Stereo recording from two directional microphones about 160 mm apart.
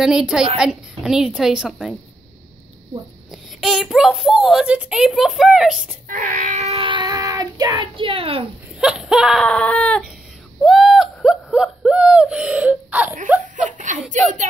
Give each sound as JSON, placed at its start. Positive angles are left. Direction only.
{"t": 0.0, "sound": "a child's voice", "side_deg": -5}
{"t": 3.3, "sound": "a child's voice", "side_deg": 0}
{"t": 6.0, "sound": "child singing", "side_deg": -55}
{"t": 8.7, "sound": "a child's voice", "side_deg": -5}
{"t": 10.6, "sound": "a sound", "side_deg": 0}
{"t": 13.7, "sound": "chuckle", "side_deg": -50}